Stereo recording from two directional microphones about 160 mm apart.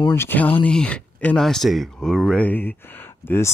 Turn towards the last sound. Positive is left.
turn(degrees=15)  # may be behind; listen again after turning